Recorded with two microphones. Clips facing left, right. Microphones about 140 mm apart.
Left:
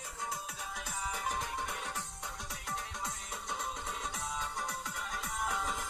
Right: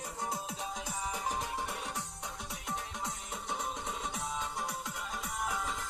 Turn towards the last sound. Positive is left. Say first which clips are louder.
# even
turn(degrees=-5)  # may be behind; listen again after turning